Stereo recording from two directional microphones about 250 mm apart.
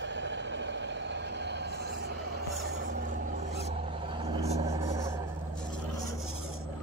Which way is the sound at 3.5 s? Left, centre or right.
Right.